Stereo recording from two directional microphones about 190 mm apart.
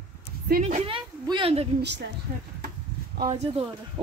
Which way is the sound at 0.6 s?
30° right (ahead or behind).